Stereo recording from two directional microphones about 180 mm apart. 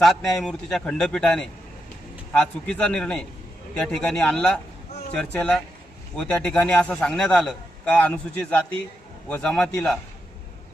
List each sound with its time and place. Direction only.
0.0 s a man's voice: centre (ahead or behind)